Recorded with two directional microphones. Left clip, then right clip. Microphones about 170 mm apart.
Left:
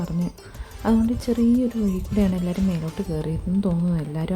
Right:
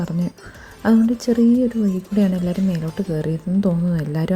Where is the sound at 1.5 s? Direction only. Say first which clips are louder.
Right 4 dB; centre (ahead or behind).